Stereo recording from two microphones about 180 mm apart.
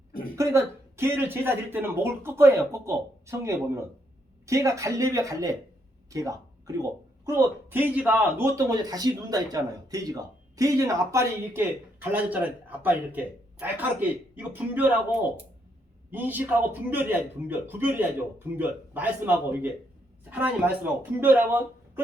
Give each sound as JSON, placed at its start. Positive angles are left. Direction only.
{"t": 0.3, "sound": "a man's voice", "side_deg": -15}